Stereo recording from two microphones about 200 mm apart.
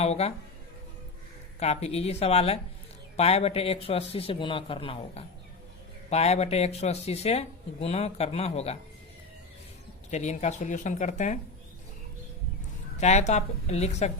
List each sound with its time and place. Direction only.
0.0 s speech: 30° left (ahead or behind)
1.5 s a man's voice: 30° left (ahead or behind)
10.1 s speech: 35° left (ahead or behind)
13.0 s speech: 35° left (ahead or behind)